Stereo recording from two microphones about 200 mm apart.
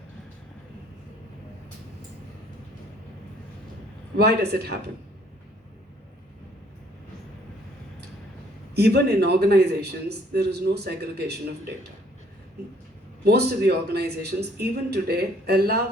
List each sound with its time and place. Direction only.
4.2 s speech: 55° right (ahead or behind)
8.7 s speech: 50° right (ahead or behind)
13.2 s speech: 55° right (ahead or behind)